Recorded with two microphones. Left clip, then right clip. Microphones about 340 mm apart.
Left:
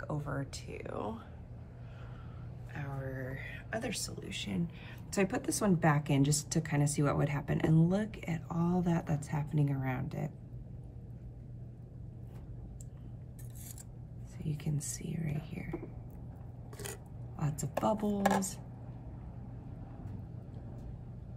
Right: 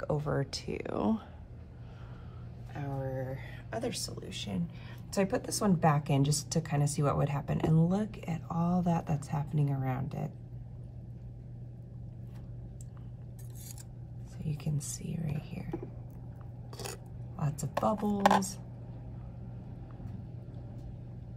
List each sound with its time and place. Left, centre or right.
0.0 s speech: right
2.7 s a woman's voice: centre
14.4 s a woman's voice: centre